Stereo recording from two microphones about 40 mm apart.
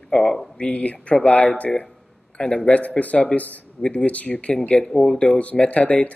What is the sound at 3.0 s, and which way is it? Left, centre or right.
Speech, left.